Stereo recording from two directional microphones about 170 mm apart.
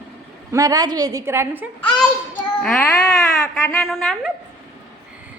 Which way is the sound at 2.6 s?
10° left (ahead or behind).